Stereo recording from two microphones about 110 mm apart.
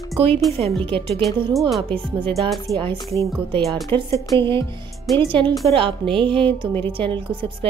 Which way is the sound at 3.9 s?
45° right (ahead or behind).